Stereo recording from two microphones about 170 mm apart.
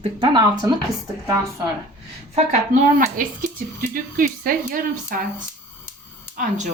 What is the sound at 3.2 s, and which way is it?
Speech, 55° right (ahead or behind).